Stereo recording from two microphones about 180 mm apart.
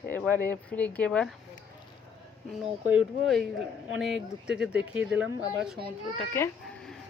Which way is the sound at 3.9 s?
Centre (ahead or behind).